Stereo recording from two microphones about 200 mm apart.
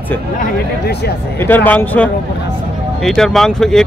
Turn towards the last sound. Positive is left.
turn(degrees=0)  # may be behind; listen again after turning